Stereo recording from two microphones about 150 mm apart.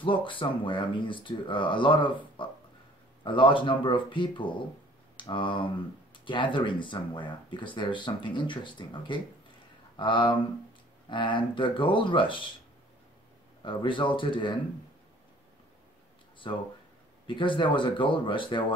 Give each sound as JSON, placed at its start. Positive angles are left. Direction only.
{"t": 0.0, "sound": "speech", "side_deg": 35}
{"t": 13.6, "sound": "speech", "side_deg": 35}
{"t": 17.3, "sound": "speech", "side_deg": 35}